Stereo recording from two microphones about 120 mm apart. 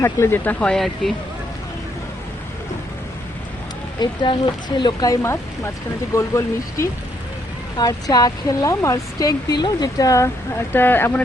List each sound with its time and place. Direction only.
0.0 s speech: 20° left (ahead or behind); by 1.1 s 5° left (ahead or behind)
4.0 s speech: 40° left (ahead or behind)
10.8 s speech: 15° left (ahead or behind)